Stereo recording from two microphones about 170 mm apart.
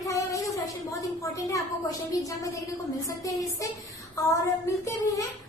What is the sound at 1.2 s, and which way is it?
A woman's voice, 20° left (ahead or behind).